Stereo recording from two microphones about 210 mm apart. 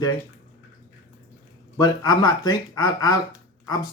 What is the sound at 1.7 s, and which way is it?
Speech, 20° left (ahead or behind).